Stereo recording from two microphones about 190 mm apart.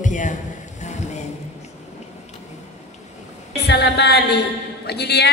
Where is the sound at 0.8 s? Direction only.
35° left (ahead or behind).